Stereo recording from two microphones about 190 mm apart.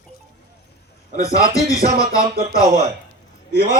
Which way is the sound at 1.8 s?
55° right (ahead or behind).